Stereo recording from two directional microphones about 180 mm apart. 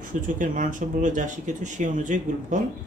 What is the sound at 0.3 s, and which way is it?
Speech, 45° right (ahead or behind).